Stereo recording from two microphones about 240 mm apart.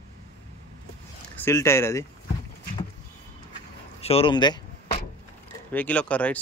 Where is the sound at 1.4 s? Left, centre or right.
Centre.